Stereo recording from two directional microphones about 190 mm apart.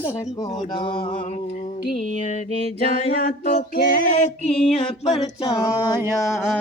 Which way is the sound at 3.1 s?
55° left (ahead or behind).